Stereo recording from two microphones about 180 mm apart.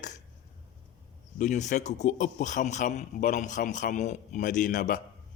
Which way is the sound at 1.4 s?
40° left (ahead or behind).